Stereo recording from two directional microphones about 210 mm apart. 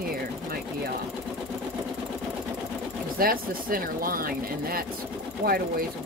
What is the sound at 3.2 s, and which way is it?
Speech, 45° right (ahead or behind).